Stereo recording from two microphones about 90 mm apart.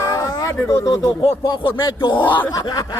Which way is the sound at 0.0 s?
35° left (ahead or behind).